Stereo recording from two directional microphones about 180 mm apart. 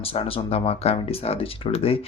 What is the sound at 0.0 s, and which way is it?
Speech, 30° left (ahead or behind).